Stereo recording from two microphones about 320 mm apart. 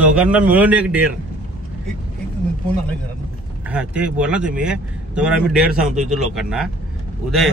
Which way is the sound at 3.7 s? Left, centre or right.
Centre.